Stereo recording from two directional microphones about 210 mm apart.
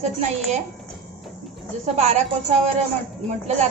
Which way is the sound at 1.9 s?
30° right (ahead or behind).